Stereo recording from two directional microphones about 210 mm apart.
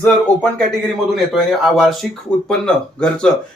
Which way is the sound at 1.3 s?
Centre (ahead or behind).